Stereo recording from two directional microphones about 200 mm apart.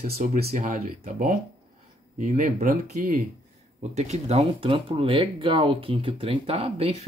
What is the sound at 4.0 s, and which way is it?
Speech, 35° right (ahead or behind).